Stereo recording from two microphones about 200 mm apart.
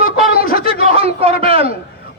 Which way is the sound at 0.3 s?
45° left (ahead or behind).